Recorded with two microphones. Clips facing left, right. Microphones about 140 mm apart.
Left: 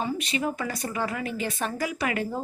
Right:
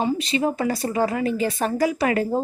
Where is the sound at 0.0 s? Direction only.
35° right (ahead or behind).